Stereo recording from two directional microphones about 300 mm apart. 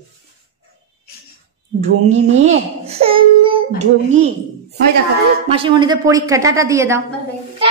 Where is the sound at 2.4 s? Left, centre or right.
Right.